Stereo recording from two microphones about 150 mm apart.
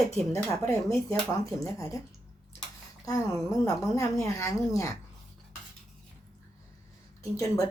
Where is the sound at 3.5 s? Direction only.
20° left (ahead or behind).